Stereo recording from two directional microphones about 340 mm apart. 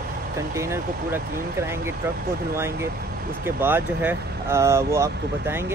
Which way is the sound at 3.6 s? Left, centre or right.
Centre.